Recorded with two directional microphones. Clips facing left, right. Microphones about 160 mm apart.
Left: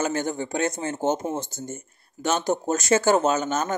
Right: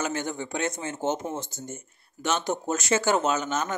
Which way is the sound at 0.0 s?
40° left (ahead or behind).